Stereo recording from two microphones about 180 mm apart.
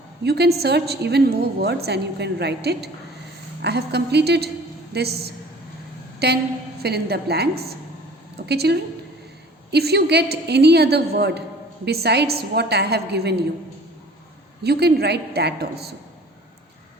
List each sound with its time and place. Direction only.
0.3 s a woman's voice: 65° right (ahead or behind)
14.6 s a woman's voice: 65° right (ahead or behind)